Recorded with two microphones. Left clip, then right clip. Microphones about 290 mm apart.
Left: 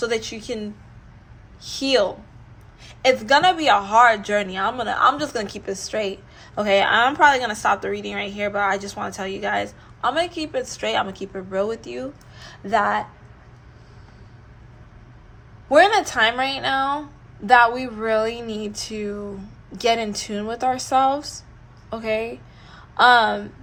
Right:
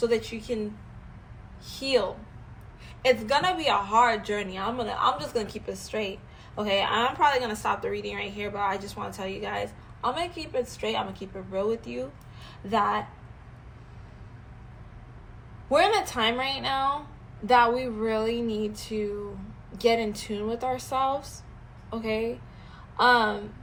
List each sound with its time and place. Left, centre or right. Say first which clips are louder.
0.1 s speech: left 2 dB; left
1.6 s speech: left 6 dB; left
3.2 s a woman's voice: left 8 dB; left
15.7 s a woman's voice: left 7 dB; left